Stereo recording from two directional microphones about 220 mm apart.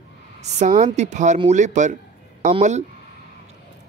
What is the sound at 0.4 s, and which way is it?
Speech, 30° right (ahead or behind).